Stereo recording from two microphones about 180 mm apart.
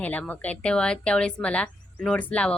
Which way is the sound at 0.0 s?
10° left (ahead or behind).